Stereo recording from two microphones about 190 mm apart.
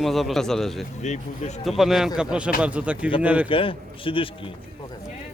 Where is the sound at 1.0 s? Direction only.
35° left (ahead or behind).